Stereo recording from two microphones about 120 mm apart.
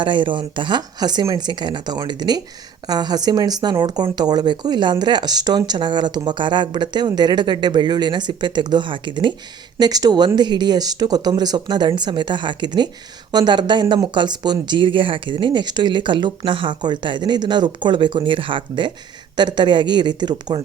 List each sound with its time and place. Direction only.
0.0 s speech: 40° right (ahead or behind)